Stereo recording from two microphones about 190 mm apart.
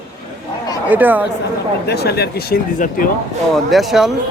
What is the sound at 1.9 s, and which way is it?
Speech, 55° left (ahead or behind).